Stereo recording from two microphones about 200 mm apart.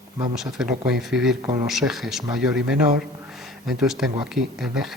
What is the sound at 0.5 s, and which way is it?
Speech, centre (ahead or behind).